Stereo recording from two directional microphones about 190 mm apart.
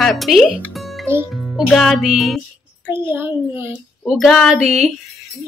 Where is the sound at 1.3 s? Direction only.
Centre (ahead or behind).